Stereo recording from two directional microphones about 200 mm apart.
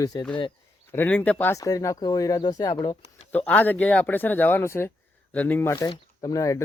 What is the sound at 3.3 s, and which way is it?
Speech, 10° left (ahead or behind).